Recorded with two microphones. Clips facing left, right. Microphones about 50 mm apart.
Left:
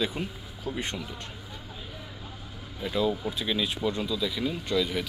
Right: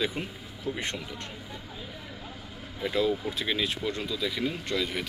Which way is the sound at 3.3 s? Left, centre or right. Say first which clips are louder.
Even; right.